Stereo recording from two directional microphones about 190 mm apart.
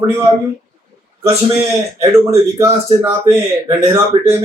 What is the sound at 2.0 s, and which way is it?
A man's voice, 15° right (ahead or behind).